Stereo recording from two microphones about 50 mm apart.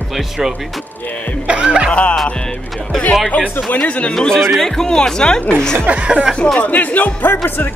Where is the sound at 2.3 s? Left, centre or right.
Centre.